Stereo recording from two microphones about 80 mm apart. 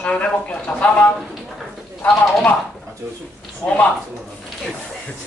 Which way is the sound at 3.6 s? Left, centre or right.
Left.